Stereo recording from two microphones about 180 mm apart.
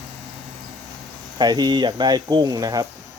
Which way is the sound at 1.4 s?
25° right (ahead or behind).